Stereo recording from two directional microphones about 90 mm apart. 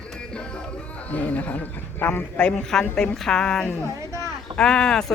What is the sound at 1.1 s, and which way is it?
A man's voice, 20° left (ahead or behind).